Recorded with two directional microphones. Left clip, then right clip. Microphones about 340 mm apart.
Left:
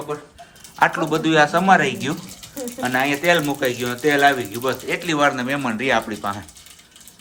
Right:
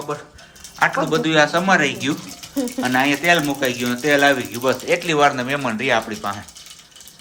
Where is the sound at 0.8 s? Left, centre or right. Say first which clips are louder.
Even; centre.